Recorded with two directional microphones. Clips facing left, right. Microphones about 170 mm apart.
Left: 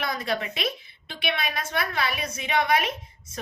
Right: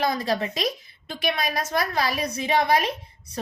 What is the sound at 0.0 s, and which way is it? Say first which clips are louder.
A woman's voice: right 4 dB; 35° right (ahead or behind).